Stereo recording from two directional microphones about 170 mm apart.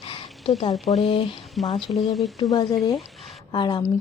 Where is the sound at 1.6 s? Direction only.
Centre (ahead or behind).